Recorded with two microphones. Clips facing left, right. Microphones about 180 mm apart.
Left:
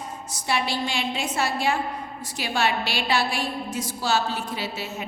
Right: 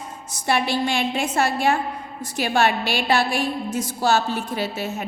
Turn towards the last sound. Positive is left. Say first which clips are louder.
# right 5 dB
turn(degrees=-50)  # may be behind; listen again after turning